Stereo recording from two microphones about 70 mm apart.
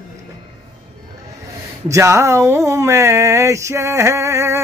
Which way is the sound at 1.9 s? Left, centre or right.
Right.